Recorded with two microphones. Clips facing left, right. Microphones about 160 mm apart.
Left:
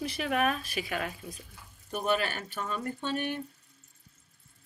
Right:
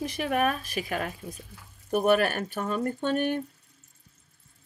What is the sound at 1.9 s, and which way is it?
Speech, 55° right (ahead or behind).